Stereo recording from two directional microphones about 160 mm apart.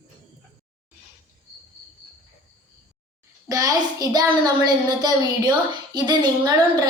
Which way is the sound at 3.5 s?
20° right (ahead or behind).